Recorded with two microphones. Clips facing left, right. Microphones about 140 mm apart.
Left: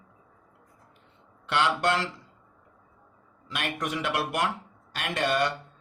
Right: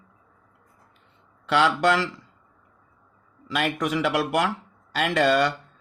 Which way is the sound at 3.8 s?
90° right.